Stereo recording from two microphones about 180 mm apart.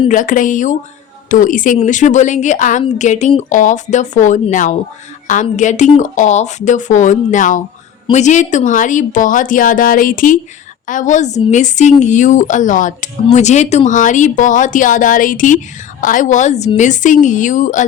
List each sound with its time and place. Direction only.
0.1 s a woman's voice: 45° left (ahead or behind)